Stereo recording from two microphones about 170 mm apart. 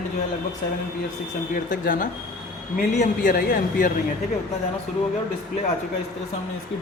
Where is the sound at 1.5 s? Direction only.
55° left (ahead or behind).